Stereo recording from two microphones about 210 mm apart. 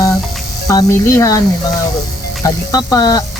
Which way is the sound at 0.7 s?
15° left (ahead or behind).